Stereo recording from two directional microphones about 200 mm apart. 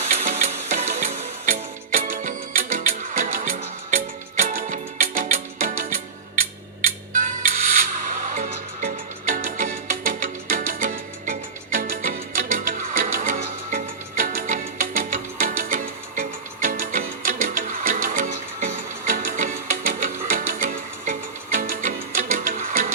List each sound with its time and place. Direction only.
0.0 s music: 40° right (ahead or behind)
8.4 s music: 40° right (ahead or behind)